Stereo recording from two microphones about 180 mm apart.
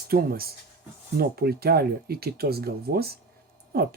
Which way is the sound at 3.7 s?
60° right (ahead or behind).